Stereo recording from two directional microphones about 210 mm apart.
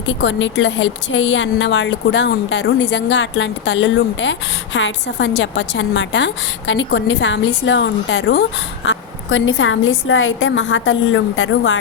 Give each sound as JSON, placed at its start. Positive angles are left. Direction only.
{"t": 0.0, "sound": "a woman's voice", "side_deg": 65}